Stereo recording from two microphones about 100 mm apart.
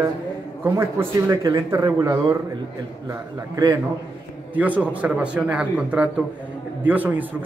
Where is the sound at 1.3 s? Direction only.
30° right (ahead or behind).